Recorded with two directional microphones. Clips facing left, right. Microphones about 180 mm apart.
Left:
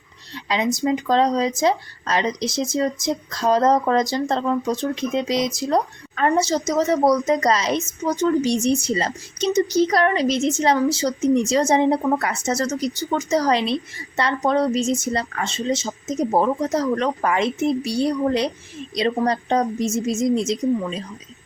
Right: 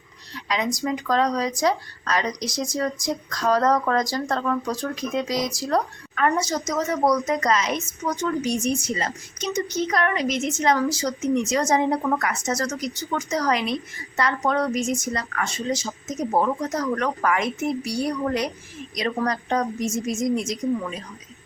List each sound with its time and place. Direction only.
0.3 s a woman's voice: 30° left (ahead or behind)